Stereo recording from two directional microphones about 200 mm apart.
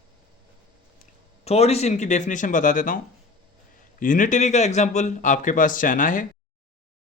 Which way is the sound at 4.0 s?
40° left (ahead or behind).